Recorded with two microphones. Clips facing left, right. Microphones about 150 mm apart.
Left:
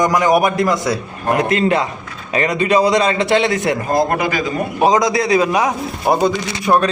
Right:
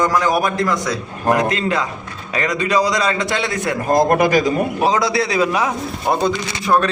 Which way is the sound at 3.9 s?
40° right (ahead or behind).